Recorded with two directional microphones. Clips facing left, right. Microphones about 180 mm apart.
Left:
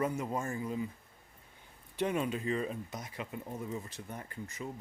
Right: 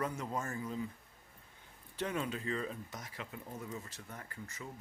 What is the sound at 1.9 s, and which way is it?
Speech, 15° left (ahead or behind).